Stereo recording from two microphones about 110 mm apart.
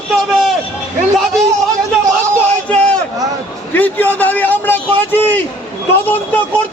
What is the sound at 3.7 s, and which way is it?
A man's voice, 15° left (ahead or behind).